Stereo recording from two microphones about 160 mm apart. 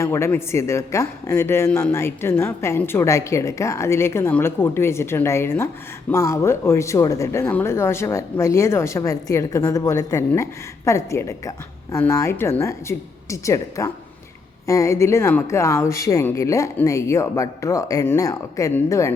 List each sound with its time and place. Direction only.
0.0 s speech: 15° left (ahead or behind)